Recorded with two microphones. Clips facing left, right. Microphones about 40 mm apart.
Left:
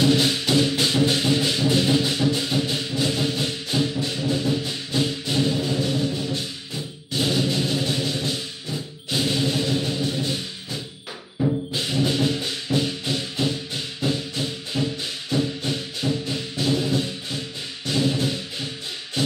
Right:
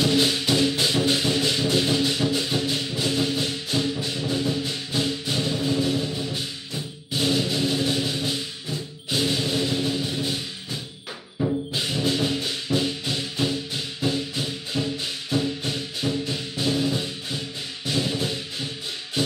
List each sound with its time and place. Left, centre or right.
0.0 s music: centre
11.3 s music: centre